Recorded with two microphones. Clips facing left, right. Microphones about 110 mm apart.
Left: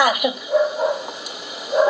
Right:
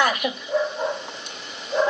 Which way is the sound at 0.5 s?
5° left (ahead or behind).